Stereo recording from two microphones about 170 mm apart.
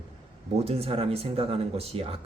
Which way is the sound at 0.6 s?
35° right (ahead or behind).